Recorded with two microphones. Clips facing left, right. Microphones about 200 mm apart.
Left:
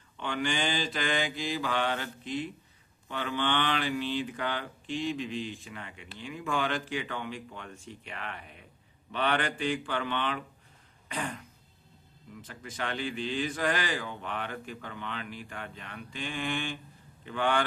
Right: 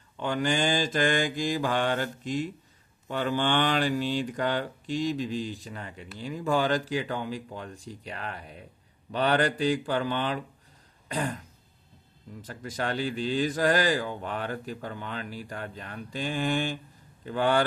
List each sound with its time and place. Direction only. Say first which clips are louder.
0.2 s mantra: right 5 dB; 40° right (ahead or behind)
3.1 s speech: right 4 dB; 40° right (ahead or behind)
12.4 s speech: right 5 dB; 40° right (ahead or behind)